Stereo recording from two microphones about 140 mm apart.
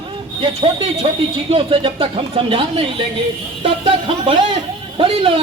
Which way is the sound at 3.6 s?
40° right (ahead or behind).